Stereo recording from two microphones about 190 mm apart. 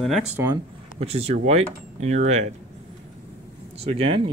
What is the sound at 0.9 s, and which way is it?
Speech, 35° right (ahead or behind).